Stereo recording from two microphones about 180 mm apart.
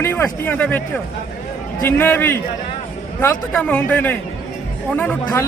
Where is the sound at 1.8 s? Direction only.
10° left (ahead or behind).